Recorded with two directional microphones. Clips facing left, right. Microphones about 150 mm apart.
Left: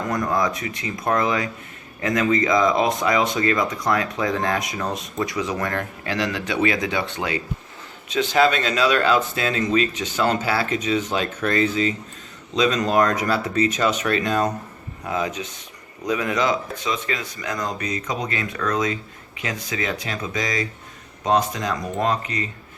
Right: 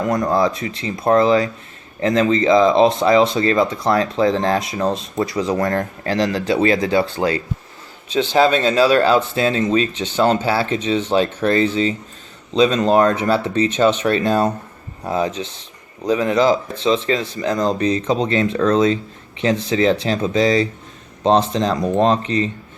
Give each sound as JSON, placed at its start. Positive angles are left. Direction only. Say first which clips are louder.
{"t": 0.3, "sound": "speech", "louder": "right 5 dB", "side_deg": -30}